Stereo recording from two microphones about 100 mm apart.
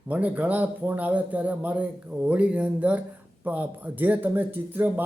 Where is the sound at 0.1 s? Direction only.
15° right (ahead or behind).